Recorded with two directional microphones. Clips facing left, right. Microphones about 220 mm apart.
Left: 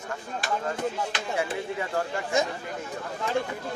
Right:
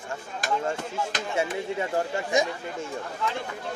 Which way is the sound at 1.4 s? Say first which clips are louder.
Right 3 dB; 25° right (ahead or behind).